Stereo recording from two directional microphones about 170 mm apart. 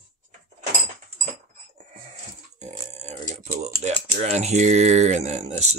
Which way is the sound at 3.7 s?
40° right (ahead or behind).